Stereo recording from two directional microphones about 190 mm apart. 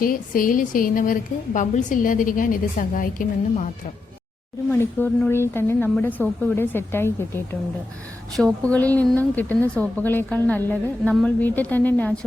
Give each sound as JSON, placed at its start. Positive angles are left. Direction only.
{"t": 0.0, "sound": "a woman's voice", "side_deg": 45}
{"t": 4.7, "sound": "a woman's voice", "side_deg": 10}
{"t": 8.3, "sound": "a woman's voice", "side_deg": 0}